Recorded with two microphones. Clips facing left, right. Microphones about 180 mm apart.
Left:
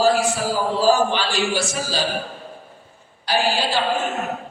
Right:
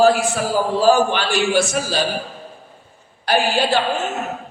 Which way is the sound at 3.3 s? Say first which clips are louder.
Right 4 dB; 55° right (ahead or behind).